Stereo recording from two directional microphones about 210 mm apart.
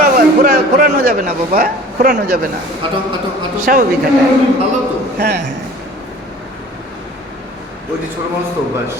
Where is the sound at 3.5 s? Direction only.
40° right (ahead or behind).